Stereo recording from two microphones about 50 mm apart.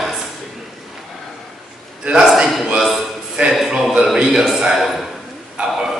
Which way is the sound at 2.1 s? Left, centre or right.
Centre.